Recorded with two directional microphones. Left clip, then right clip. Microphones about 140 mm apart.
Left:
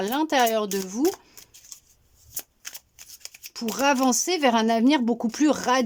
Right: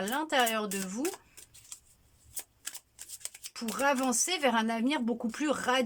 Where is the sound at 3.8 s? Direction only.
30° left (ahead or behind).